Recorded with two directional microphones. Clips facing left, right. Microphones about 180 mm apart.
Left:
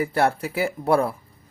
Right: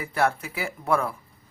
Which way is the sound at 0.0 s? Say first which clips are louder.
Left 4 dB; 35° left (ahead or behind).